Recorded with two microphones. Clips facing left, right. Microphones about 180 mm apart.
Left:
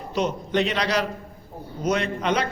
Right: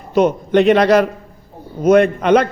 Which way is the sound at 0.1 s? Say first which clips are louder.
Right 11 dB; 55° right (ahead or behind).